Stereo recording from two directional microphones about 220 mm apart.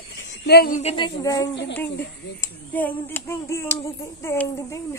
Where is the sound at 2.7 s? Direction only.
10° left (ahead or behind).